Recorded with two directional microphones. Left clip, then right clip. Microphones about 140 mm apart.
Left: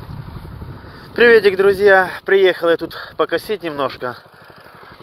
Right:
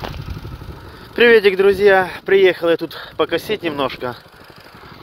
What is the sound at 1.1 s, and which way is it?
Speech, 20° right (ahead or behind).